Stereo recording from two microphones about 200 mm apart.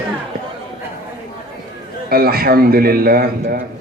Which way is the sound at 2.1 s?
50° right (ahead or behind).